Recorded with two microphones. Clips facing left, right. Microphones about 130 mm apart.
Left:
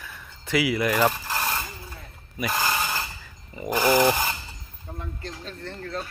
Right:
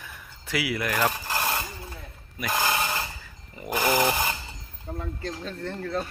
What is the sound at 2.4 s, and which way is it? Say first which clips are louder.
Speech: even; centre (ahead or behind).